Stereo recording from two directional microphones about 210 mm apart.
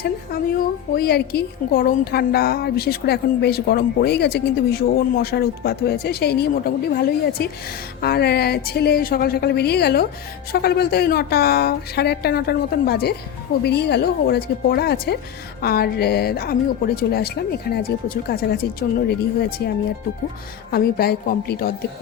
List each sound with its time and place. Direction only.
0.9 s a woman's voice: 50° left (ahead or behind)
20.7 s a woman's voice: 45° left (ahead or behind)